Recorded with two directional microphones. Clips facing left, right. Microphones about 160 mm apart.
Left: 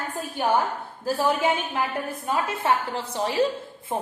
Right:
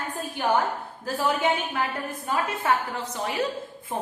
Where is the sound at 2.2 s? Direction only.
25° left (ahead or behind).